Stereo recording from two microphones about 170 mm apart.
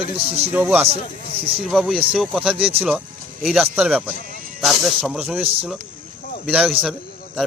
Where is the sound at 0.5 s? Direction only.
10° right (ahead or behind).